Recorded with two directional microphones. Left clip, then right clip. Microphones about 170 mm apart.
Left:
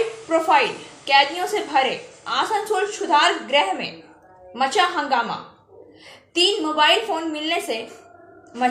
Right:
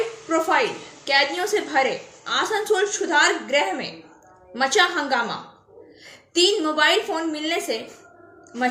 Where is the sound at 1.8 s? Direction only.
50° right (ahead or behind).